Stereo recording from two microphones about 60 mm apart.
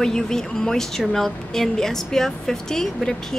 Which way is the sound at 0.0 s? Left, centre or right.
Centre.